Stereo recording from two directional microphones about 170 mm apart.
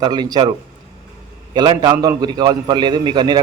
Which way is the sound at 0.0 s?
25° right (ahead or behind).